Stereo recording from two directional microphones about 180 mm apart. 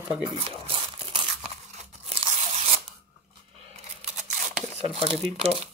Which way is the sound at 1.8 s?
35° right (ahead or behind).